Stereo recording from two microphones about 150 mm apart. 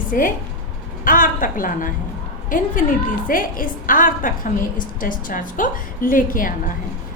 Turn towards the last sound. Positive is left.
turn(degrees=65)  # may be behind; listen again after turning